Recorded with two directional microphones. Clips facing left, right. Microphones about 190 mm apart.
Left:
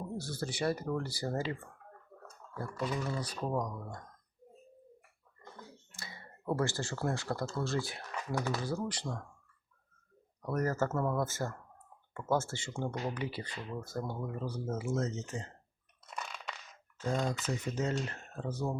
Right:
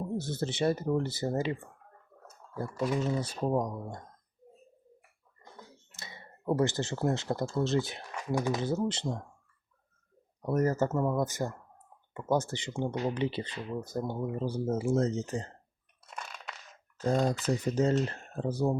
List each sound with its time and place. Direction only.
0.2 s speech: 25° right (ahead or behind)
2.9 s speech: 25° right (ahead or behind)
5.9 s speech: 20° right (ahead or behind)
10.4 s speech: 20° right (ahead or behind)
17.0 s speech: 35° right (ahead or behind)